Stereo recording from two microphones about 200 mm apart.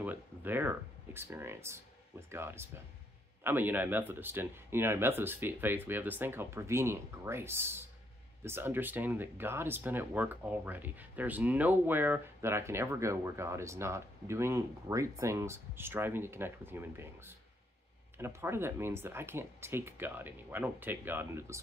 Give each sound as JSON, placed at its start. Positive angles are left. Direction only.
{"t": 0.0, "sound": "speech", "side_deg": -10}